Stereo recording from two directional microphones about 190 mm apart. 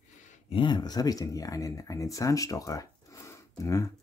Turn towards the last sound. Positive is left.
turn(degrees=15)  # may be behind; listen again after turning